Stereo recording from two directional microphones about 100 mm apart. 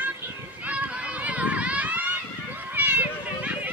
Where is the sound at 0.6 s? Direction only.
15° right (ahead or behind).